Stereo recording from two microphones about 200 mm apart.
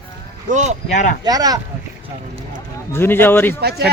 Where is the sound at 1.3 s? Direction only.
20° right (ahead or behind).